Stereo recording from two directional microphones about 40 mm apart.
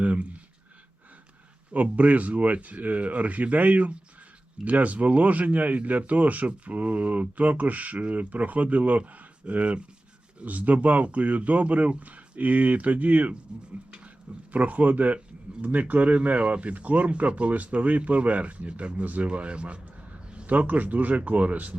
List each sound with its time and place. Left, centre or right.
0.0 s a sound: right
1.7 s speech: right
14.5 s speech: right
20.5 s speech: right